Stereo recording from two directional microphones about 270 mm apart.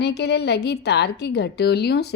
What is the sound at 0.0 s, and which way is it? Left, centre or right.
A woman's voice, left.